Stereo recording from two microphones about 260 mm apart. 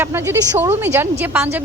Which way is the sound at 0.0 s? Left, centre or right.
Centre.